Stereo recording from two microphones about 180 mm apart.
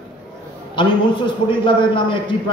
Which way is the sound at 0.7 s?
25° left (ahead or behind).